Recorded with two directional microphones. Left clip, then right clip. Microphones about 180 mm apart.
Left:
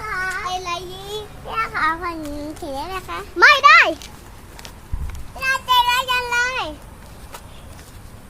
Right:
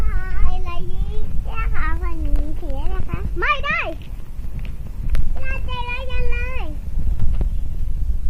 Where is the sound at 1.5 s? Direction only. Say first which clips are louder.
Left 9 dB; 50° left (ahead or behind).